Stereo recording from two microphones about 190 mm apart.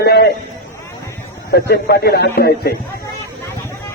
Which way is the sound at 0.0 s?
60° left (ahead or behind).